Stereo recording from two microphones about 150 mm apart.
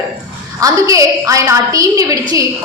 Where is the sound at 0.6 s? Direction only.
20° right (ahead or behind).